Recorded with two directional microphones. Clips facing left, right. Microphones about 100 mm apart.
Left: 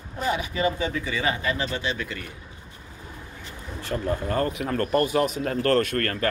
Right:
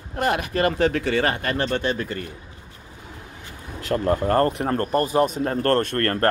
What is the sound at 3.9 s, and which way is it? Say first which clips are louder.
Speech: right 6 dB; 65° right (ahead or behind).